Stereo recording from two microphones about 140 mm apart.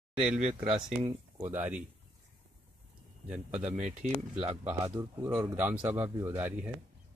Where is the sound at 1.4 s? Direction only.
15° right (ahead or behind).